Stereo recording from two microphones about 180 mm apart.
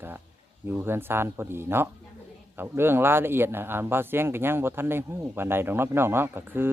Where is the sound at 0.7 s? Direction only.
10° right (ahead or behind).